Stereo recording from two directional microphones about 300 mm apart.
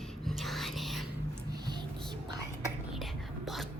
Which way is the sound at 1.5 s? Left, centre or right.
Centre.